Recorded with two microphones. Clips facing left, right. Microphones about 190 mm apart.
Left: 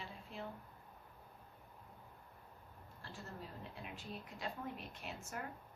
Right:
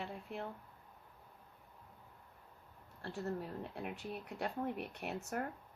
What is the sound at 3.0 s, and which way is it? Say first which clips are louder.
Speech: right 10 dB; 60° right (ahead or behind).